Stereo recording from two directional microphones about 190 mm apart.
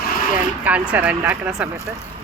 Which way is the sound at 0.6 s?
5° right (ahead or behind).